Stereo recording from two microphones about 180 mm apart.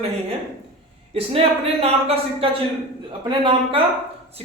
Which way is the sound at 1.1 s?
35° right (ahead or behind).